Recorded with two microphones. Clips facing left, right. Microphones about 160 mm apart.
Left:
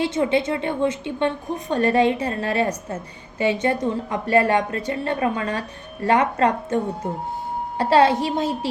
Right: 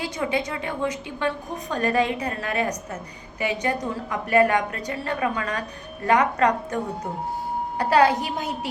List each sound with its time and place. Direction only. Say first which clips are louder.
0.0 s a woman's voice: left 6 dB; 25° left (ahead or behind)
7.8 s a woman's voice: left 2 dB; 25° left (ahead or behind)